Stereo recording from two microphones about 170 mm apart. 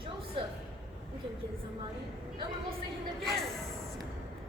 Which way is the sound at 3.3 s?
Centre (ahead or behind).